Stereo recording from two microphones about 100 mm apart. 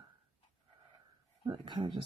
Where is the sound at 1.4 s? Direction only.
45° right (ahead or behind).